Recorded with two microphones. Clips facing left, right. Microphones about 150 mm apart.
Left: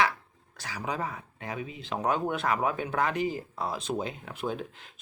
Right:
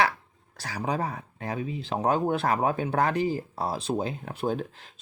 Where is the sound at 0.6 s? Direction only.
35° right (ahead or behind).